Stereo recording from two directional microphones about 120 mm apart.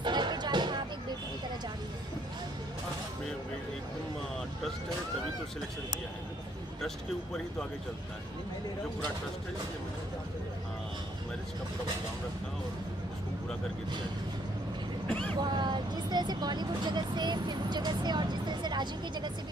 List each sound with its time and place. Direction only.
0.0 s a sound: 40° right (ahead or behind)
15.0 s speech: 10° left (ahead or behind)
15.4 s speech: 40° right (ahead or behind)